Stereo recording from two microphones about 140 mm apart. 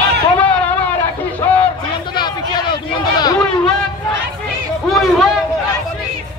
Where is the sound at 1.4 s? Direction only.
15° left (ahead or behind).